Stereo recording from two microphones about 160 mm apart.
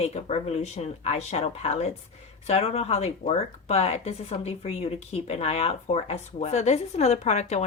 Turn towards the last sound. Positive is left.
turn(degrees=45)  # may be behind; listen again after turning